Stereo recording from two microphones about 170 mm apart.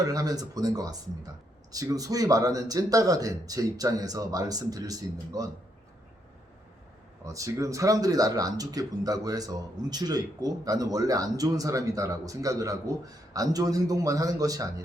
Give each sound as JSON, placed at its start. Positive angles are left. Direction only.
{"t": 0.0, "sound": "speech", "side_deg": -20}
{"t": 7.3, "sound": "speech", "side_deg": -20}